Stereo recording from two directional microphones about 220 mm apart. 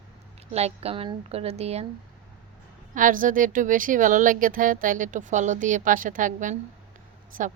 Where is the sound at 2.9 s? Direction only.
35° right (ahead or behind).